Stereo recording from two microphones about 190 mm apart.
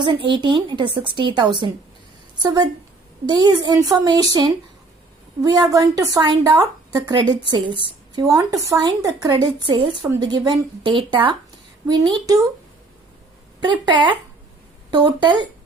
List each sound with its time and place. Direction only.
0.0 s speech: 25° right (ahead or behind)
13.6 s speech: 25° right (ahead or behind)